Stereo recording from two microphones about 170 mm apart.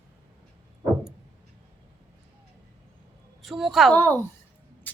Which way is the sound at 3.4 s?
Centre (ahead or behind).